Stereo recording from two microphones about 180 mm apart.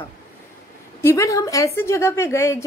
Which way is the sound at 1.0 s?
15° left (ahead or behind).